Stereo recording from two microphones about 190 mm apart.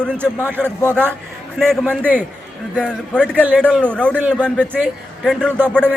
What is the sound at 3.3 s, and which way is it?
Speech, 10° right (ahead or behind).